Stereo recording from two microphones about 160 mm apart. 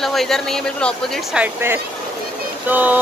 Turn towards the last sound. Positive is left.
turn(degrees=-10)  # may be behind; listen again after turning